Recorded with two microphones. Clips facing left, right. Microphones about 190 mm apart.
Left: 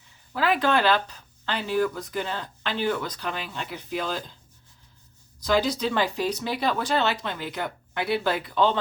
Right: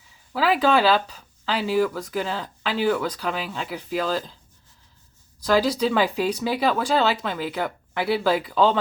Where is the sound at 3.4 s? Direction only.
90° right.